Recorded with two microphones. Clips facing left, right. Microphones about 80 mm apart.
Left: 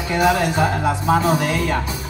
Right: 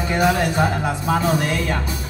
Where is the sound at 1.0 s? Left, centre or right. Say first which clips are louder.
Left 3 dB; left.